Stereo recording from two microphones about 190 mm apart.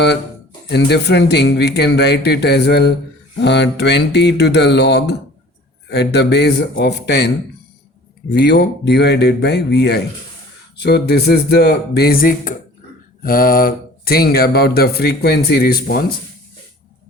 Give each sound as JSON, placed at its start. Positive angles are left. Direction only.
{"t": 0.7, "sound": "speech", "side_deg": 60}
{"t": 8.3, "sound": "speech", "side_deg": 65}